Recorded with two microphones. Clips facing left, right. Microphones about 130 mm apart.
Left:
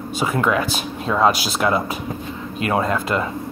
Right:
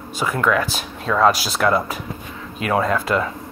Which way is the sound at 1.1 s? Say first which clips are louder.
Right 1 dB; 15° left (ahead or behind).